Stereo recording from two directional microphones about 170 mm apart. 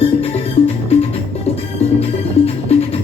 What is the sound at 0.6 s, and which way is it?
Music, 35° left (ahead or behind).